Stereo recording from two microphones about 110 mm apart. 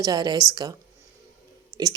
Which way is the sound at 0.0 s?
40° right (ahead or behind).